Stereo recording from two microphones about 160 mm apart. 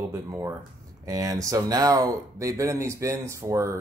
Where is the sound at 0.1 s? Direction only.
20° right (ahead or behind).